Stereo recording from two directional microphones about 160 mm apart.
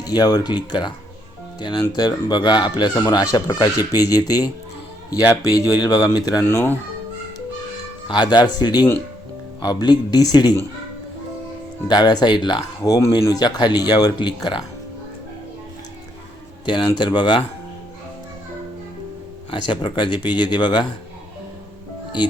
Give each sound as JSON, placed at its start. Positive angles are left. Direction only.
{"t": 0.0, "sound": "speech", "side_deg": 25}
{"t": 8.0, "sound": "speech", "side_deg": 30}
{"t": 11.9, "sound": "speech", "side_deg": 25}
{"t": 16.6, "sound": "speech", "side_deg": 30}
{"t": 19.5, "sound": "speech", "side_deg": 30}